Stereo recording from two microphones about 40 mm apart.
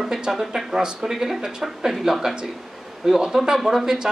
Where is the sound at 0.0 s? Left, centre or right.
Centre.